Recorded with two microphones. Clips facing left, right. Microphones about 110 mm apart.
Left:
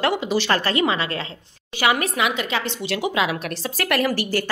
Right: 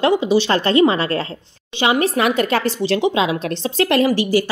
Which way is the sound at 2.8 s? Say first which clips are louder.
Right 4 dB; 30° right (ahead or behind).